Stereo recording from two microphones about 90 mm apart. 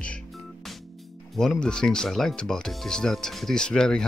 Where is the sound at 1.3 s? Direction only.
5° left (ahead or behind).